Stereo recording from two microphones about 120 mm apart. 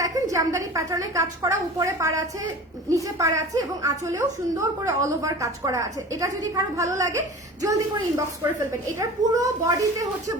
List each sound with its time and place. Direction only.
0.0 s a woman's voice: 30° right (ahead or behind)